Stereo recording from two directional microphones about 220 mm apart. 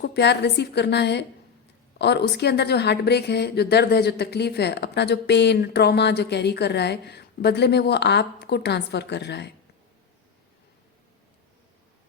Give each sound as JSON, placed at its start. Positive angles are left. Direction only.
{"t": 0.0, "sound": "a woman's voice", "side_deg": 50}